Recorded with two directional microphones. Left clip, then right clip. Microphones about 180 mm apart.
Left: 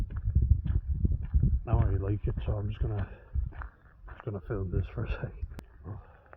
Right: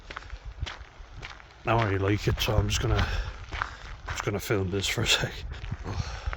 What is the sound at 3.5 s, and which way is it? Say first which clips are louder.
Walk: right 17 dB; 40° left (ahead or behind).